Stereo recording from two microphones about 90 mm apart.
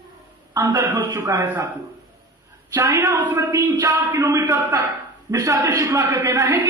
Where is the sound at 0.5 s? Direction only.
30° right (ahead or behind).